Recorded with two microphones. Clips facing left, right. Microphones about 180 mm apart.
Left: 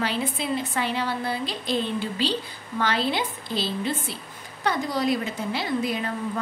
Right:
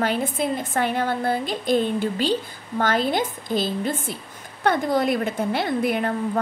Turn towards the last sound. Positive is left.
turn(degrees=-55)  # may be behind; listen again after turning